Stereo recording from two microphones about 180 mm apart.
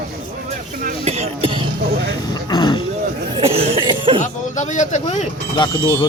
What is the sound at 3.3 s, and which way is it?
Cough, 30° right (ahead or behind).